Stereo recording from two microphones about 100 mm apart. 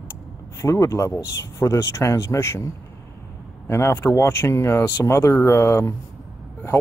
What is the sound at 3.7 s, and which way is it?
Speech, 25° left (ahead or behind).